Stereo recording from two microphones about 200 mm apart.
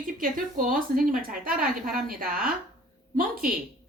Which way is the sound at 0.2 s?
45° right (ahead or behind).